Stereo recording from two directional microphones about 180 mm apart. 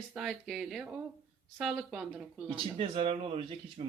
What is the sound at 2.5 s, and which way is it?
Speech, 30° right (ahead or behind).